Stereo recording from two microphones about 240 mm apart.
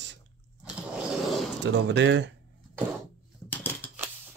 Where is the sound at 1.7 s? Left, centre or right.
Right.